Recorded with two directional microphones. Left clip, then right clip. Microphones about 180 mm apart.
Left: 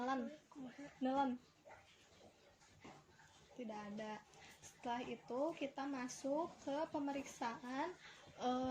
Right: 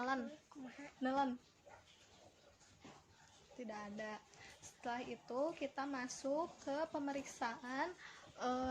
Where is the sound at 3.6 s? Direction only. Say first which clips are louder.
Right 1 dB; 15° left (ahead or behind).